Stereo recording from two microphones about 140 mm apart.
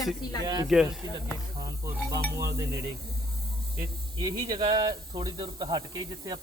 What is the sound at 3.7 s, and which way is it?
Speech, 25° right (ahead or behind).